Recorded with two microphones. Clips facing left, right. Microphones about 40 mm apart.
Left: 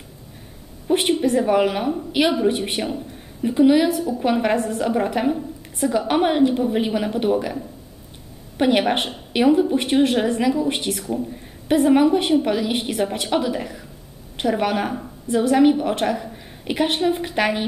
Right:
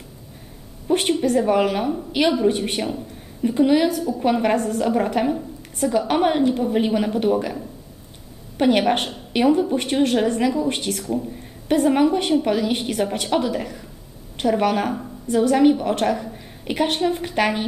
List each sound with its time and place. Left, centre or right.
0.8 s a woman's voice: centre
3.9 s a woman's voice: centre
8.5 s a woman's voice: centre